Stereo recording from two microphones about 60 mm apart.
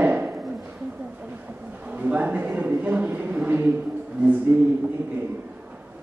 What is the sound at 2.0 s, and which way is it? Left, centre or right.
Speech, right.